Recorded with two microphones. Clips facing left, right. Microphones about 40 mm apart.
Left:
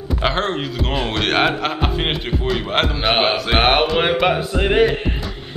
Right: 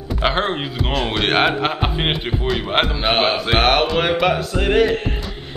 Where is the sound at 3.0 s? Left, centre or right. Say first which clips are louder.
Even; centre.